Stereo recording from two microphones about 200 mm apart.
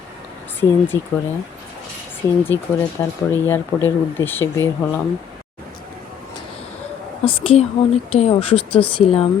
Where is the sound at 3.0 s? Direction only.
15° left (ahead or behind).